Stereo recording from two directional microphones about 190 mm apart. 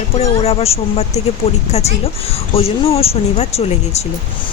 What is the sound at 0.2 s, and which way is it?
Speech, 30° left (ahead or behind).